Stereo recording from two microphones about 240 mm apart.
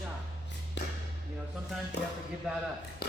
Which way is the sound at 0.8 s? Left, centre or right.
Left.